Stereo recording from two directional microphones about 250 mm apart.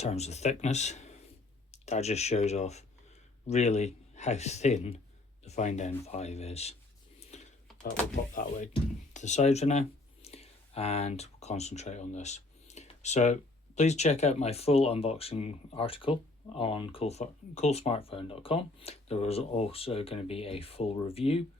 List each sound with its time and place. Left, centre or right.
0.0 s speech: left
7.3 s computer keyboard: left
7.7 s door: centre
8.1 s speech: left